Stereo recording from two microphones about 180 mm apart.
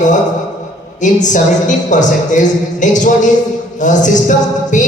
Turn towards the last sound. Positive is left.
turn(degrees=45)  # may be behind; listen again after turning